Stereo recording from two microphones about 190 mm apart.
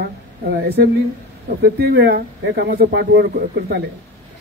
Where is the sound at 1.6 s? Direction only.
55° right (ahead or behind).